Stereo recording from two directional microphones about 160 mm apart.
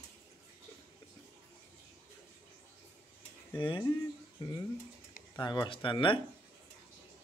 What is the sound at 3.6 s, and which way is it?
Speech, 30° left (ahead or behind).